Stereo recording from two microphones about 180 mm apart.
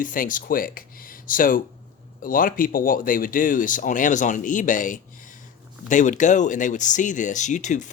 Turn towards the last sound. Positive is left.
turn(degrees=45)  # may be behind; listen again after turning